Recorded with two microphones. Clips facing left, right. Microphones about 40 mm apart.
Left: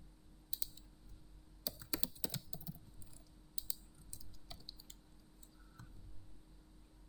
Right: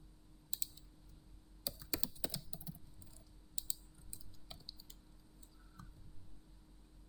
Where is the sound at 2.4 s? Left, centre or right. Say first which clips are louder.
Left 1 dB; centre.